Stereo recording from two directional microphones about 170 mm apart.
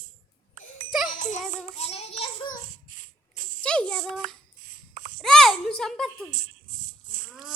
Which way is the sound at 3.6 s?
5° left (ahead or behind).